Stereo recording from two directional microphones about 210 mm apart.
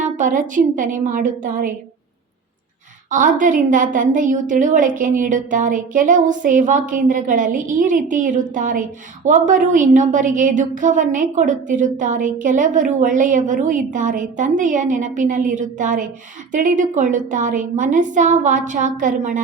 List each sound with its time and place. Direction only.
0.0 s a woman's voice: 40° right (ahead or behind)
3.1 s a woman's voice: 40° right (ahead or behind)